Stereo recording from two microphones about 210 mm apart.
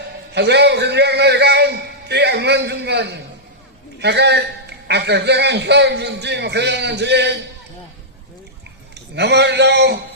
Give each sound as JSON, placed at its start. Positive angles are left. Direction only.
{"t": 0.3, "sound": "a man's voice", "side_deg": -55}
{"t": 9.1, "sound": "a man's voice", "side_deg": -55}